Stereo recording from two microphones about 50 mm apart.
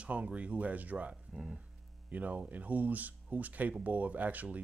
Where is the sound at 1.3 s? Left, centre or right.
Centre.